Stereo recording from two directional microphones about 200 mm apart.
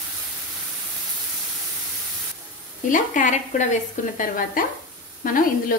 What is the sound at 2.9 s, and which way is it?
A woman's voice, 40° left (ahead or behind).